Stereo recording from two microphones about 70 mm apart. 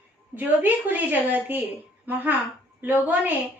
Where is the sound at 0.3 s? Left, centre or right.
Right.